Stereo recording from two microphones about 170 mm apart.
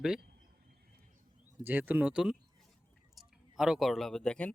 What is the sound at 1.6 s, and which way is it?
Speech, 10° right (ahead or behind).